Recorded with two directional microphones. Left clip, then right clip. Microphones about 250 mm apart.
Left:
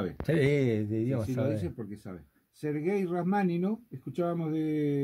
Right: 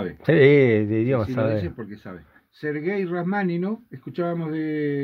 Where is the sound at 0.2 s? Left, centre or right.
Right.